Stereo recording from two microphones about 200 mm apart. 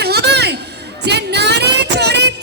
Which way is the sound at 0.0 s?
55° right (ahead or behind).